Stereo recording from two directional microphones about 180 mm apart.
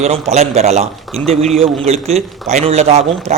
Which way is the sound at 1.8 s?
35° right (ahead or behind).